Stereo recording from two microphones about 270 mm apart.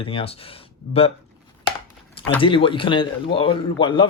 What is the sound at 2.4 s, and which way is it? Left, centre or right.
Speech, centre.